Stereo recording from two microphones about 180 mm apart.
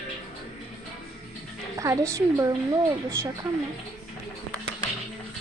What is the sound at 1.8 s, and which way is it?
Speech, 15° right (ahead or behind).